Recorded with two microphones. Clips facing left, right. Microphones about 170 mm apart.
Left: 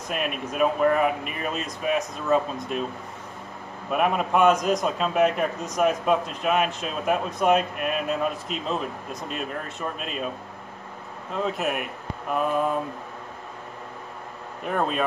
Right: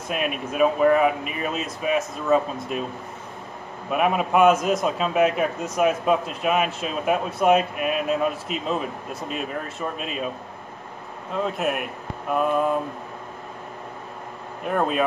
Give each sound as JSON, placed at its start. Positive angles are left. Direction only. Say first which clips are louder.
{"t": 0.1, "sound": "a man's voice", "louder": "right 2 dB", "side_deg": 0}
{"t": 3.9, "sound": "a man's voice", "louder": "right 2 dB", "side_deg": -5}
{"t": 11.3, "sound": "a man's voice", "louder": "right 2 dB", "side_deg": 0}
{"t": 14.7, "sound": "a man's voice", "louder": "right 3 dB", "side_deg": -5}